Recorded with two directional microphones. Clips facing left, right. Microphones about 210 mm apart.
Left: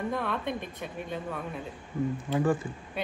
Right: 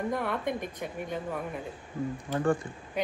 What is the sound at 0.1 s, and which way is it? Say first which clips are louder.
Speech: right 1 dB; 15° right (ahead or behind).